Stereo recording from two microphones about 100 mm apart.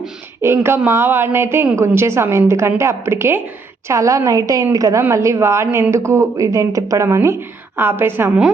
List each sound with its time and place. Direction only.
0.4 s a woman's voice: 25° right (ahead or behind)